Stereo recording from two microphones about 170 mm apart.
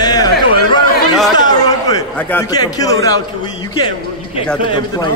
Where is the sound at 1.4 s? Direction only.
25° left (ahead or behind).